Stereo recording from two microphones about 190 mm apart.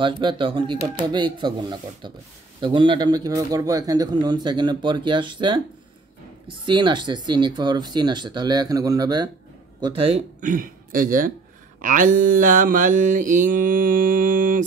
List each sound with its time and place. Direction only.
0.0 s speech: 25° right (ahead or behind)
6.6 s speech: 25° right (ahead or behind); by 11.3 s 45° right (ahead or behind)
11.8 s mantra: 45° right (ahead or behind)